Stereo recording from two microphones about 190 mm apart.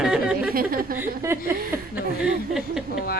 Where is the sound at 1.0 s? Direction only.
15° right (ahead or behind).